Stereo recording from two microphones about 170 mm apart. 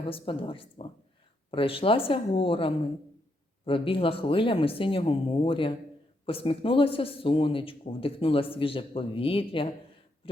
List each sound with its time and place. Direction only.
0.0 s a man's voice: 30° left (ahead or behind)